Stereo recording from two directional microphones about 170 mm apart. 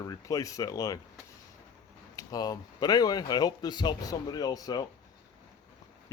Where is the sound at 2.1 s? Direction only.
20° left (ahead or behind).